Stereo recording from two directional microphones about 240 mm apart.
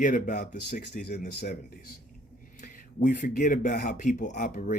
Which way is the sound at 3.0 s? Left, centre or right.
Left.